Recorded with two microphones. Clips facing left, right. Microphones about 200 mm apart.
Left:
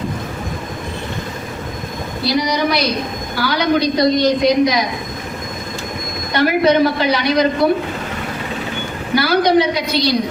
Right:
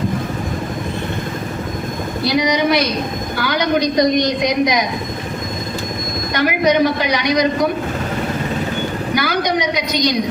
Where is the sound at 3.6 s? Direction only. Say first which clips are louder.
Even; 20° right (ahead or behind).